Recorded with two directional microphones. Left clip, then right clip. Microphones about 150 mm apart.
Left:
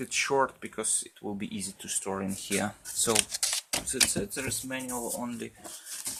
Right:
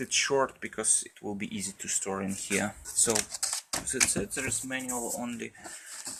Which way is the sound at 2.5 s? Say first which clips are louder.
Right 1 dB; 20° left (ahead or behind).